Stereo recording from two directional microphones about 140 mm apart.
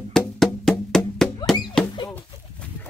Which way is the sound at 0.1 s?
5° left (ahead or behind).